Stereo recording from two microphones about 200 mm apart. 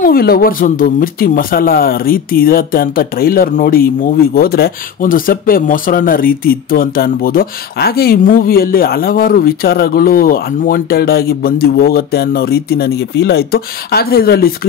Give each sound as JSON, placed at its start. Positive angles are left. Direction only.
{"t": 0.0, "sound": "speech", "side_deg": 50}